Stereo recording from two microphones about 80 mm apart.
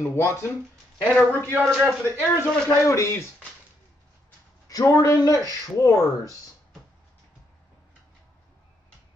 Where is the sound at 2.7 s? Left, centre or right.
Left.